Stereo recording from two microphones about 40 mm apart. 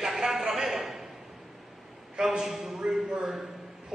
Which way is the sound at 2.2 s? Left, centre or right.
Centre.